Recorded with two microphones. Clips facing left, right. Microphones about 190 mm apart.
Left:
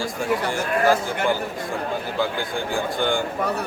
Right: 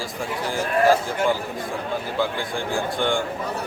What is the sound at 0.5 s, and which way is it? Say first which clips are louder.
A man's voice: right 4 dB; centre (ahead or behind).